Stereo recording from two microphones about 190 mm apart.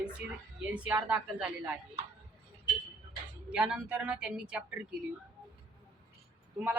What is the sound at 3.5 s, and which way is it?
Speech, 5° right (ahead or behind).